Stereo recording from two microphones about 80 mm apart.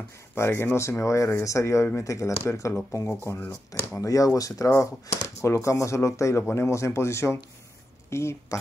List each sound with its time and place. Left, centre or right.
0.3 s speech: left
4.0 s speech: left